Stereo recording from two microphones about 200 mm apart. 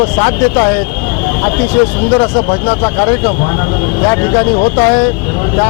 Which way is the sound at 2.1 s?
25° left (ahead or behind).